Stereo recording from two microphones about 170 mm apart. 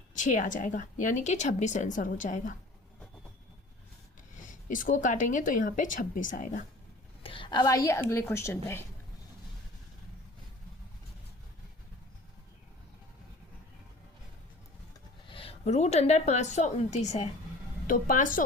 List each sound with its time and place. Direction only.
0.2 s a woman's voice: 45° left (ahead or behind)
4.4 s a woman's voice: 50° left (ahead or behind)
7.2 s a woman's voice: 30° left (ahead or behind); by 8.8 s 15° left (ahead or behind)
15.3 s a woman's voice: 35° left (ahead or behind); by 18.4 s 50° left (ahead or behind)